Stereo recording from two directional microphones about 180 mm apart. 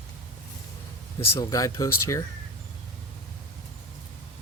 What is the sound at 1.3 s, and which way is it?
Speech, 20° left (ahead or behind).